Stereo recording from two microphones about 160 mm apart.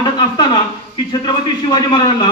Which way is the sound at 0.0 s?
30° left (ahead or behind).